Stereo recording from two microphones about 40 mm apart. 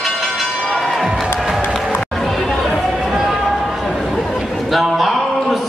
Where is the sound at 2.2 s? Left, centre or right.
Centre.